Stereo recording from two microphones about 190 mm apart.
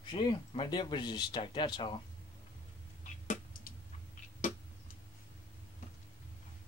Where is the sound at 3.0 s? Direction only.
40° left (ahead or behind).